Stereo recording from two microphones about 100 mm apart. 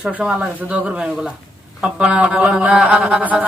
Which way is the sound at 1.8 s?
10° right (ahead or behind).